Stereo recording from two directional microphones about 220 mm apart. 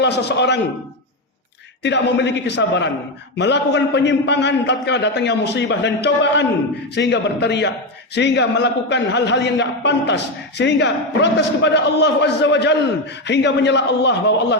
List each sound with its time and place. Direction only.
0.0 s a man's voice: 50° left (ahead or behind)
1.8 s a man's voice: 55° left (ahead or behind)